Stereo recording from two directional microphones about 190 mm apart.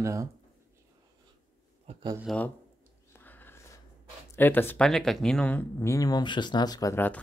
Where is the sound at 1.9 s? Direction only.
25° right (ahead or behind).